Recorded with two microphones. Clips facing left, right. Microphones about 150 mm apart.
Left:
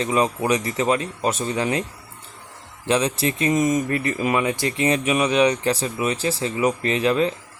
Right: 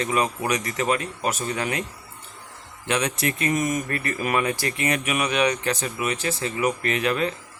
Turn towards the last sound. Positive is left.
turn(degrees=25)  # may be behind; listen again after turning